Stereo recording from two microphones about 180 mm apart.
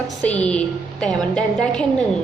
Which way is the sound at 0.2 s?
5° left (ahead or behind).